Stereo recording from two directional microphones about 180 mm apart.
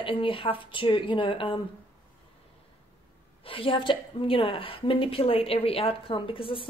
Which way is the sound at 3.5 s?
30° left (ahead or behind).